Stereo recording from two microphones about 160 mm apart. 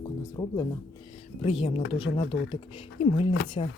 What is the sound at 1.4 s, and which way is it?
Speech, 35° left (ahead or behind).